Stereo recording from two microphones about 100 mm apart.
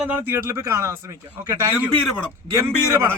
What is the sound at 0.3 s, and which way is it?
Speech, 25° right (ahead or behind).